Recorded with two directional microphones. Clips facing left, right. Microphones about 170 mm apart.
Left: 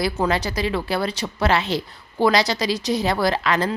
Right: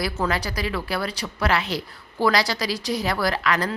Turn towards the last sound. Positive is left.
turn(degrees=25)  # may be behind; listen again after turning